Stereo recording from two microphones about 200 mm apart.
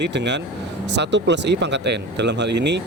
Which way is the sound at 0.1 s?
60° right (ahead or behind).